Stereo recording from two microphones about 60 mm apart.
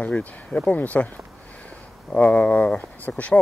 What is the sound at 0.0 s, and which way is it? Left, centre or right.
Speech, left.